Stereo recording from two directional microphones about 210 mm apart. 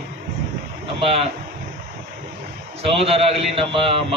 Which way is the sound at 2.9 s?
30° right (ahead or behind).